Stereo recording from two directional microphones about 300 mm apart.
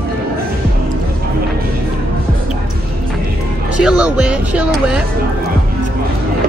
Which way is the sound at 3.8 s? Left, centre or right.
Centre.